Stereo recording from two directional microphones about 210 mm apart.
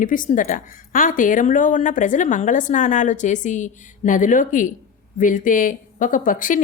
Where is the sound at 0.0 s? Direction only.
40° left (ahead or behind).